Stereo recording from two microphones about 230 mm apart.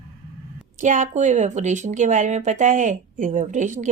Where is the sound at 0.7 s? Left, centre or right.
Right.